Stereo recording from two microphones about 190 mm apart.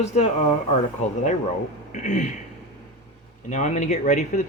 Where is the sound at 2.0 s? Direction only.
40° left (ahead or behind).